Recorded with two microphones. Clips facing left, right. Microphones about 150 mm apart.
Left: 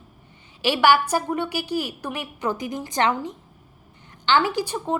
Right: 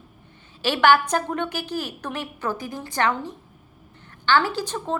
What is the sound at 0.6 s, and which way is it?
A woman's voice, 10° left (ahead or behind).